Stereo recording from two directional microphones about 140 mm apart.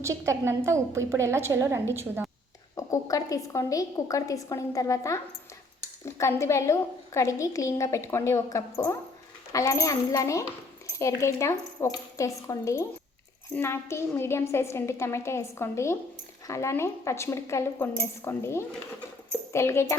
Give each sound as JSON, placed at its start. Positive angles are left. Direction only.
{"t": 0.0, "sound": "a woman's voice", "side_deg": -20}
{"t": 2.7, "sound": "a woman's voice", "side_deg": 25}